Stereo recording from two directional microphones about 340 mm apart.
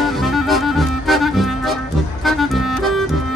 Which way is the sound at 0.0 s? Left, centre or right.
Centre.